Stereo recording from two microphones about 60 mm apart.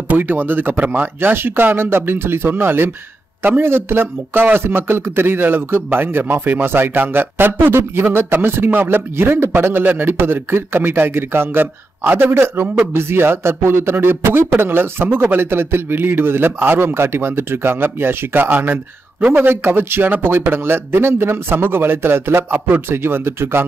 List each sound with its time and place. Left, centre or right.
0.1 s a man's voice: right